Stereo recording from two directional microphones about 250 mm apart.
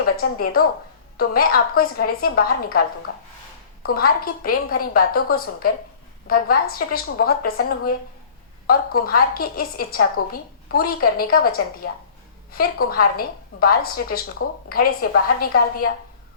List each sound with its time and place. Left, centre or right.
0.0 s a woman's voice: left